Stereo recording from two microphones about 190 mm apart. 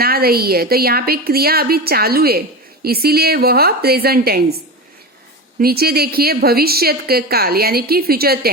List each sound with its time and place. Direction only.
0.0 s a woman's voice: 55° right (ahead or behind)
5.5 s a woman's voice: 55° right (ahead or behind)